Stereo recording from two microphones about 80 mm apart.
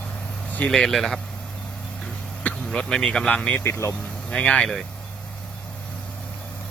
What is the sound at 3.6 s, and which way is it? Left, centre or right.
Speech, left.